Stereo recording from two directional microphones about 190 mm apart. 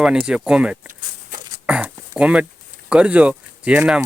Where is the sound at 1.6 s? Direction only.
5° right (ahead or behind).